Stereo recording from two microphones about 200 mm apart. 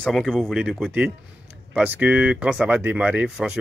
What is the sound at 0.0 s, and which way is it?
Speech, 5° left (ahead or behind).